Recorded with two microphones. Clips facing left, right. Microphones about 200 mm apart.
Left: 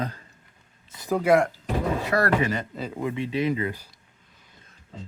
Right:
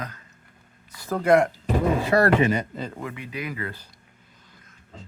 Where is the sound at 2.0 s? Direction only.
25° right (ahead or behind).